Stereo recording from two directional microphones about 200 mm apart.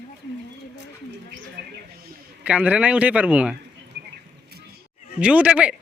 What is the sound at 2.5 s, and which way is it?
Speech, 5° right (ahead or behind).